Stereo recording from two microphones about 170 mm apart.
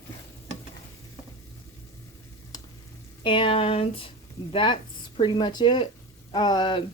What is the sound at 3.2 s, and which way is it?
Speech, 30° left (ahead or behind).